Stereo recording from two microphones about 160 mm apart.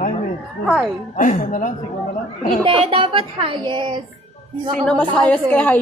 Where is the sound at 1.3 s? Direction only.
50° left (ahead or behind).